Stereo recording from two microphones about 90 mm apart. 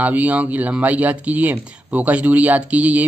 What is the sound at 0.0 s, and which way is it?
Speech, 15° right (ahead or behind).